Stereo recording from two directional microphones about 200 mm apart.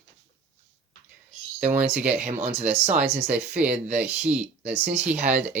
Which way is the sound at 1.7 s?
5° right (ahead or behind).